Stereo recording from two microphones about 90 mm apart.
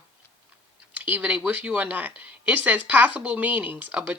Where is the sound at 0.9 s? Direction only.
15° right (ahead or behind).